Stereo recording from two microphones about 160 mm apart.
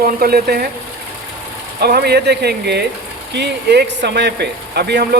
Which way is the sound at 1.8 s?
85° right.